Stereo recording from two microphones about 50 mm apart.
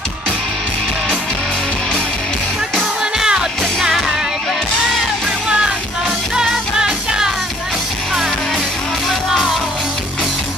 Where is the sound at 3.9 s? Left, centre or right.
Centre.